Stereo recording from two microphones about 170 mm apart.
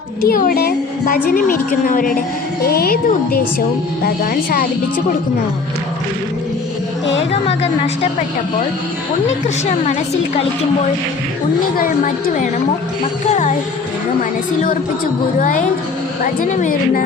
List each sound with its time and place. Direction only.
0.2 s a woman's voice: 55° left (ahead or behind)
7.4 s speech: 35° left (ahead or behind)
11.8 s a woman's voice: 55° left (ahead or behind)
13.2 s speech: 40° left (ahead or behind)
15.4 s a woman's voice: 50° left (ahead or behind)